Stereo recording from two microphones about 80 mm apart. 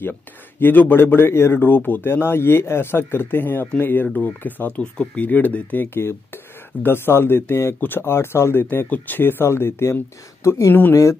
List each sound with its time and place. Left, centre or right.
0.6 s speech: left